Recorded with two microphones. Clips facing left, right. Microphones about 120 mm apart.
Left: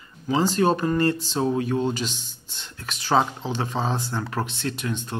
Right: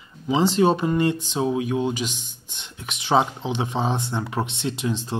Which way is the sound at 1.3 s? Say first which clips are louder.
Right 1 dB; 5° right (ahead or behind).